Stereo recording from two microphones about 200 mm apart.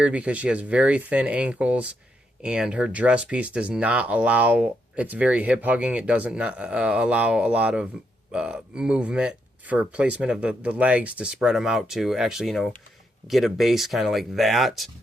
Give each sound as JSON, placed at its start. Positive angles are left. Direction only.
{"t": 0.0, "sound": "speech", "side_deg": -5}